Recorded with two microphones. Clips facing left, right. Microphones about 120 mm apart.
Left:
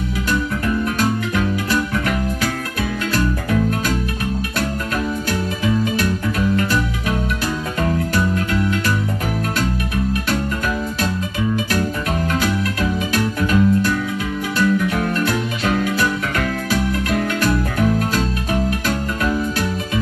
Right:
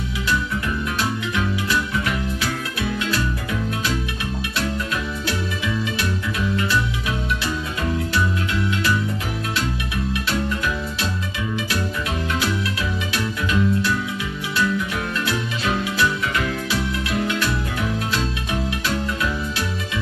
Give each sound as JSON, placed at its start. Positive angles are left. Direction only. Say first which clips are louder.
{"t": 0.8, "sound": "music", "louder": "left 5 dB", "side_deg": 45}
{"t": 5.6, "sound": "music", "louder": "left 6 dB", "side_deg": 45}
{"t": 13.1, "sound": "music", "louder": "left 4 dB", "side_deg": 45}